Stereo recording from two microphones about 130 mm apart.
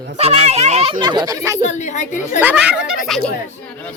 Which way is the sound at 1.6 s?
65° left (ahead or behind).